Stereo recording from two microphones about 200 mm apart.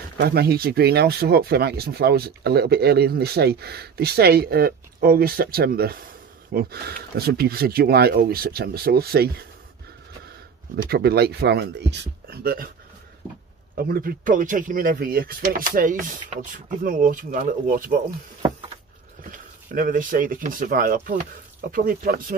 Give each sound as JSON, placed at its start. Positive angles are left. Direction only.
{"t": 0.2, "sound": "speech", "side_deg": -55}
{"t": 10.9, "sound": "speech", "side_deg": -50}
{"t": 13.7, "sound": "speech", "side_deg": -50}
{"t": 18.4, "sound": "a sound", "side_deg": -25}
{"t": 19.3, "sound": "speech", "side_deg": -40}